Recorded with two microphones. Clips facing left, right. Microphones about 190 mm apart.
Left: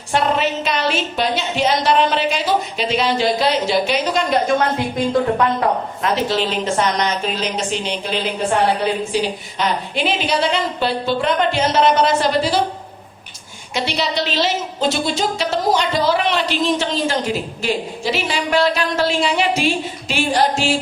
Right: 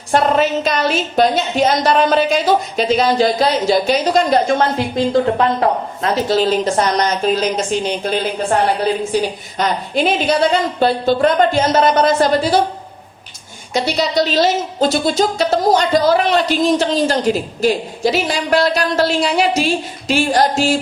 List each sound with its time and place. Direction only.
0.1 s a woman's voice: 45° right (ahead or behind)
9.6 s a woman's voice: 45° right (ahead or behind)
13.7 s a woman's voice: 40° right (ahead or behind)